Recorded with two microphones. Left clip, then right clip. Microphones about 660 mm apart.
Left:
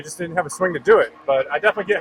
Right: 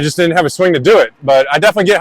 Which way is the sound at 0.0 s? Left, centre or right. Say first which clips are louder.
Right 13 dB; right.